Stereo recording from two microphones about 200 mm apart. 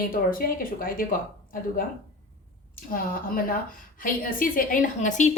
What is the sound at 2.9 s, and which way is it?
A woman's voice, 45° left (ahead or behind).